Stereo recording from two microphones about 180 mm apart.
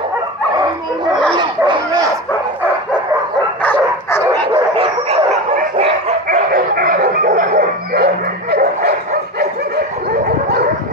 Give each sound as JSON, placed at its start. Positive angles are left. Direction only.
{"t": 1.3, "sound": "dog", "side_deg": -25}
{"t": 3.6, "sound": "dog", "side_deg": 10}
{"t": 4.3, "sound": "dog", "side_deg": -30}
{"t": 6.2, "sound": "dog", "side_deg": -50}